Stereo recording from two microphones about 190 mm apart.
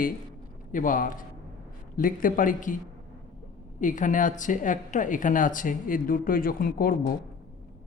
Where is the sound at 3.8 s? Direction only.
40° left (ahead or behind).